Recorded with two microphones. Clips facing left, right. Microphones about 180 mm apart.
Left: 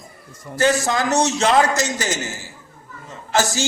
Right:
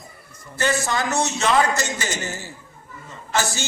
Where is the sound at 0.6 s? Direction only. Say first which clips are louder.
Left 4 dB; 45° left (ahead or behind).